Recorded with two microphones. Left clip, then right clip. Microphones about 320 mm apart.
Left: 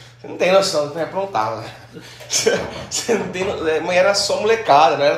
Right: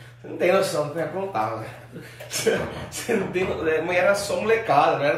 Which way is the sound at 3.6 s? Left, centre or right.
Centre.